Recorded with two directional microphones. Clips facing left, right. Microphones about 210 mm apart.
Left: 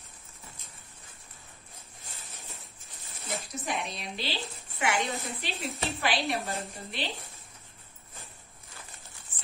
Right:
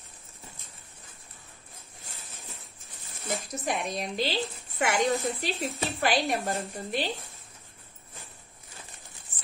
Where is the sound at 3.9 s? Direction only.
45° right (ahead or behind).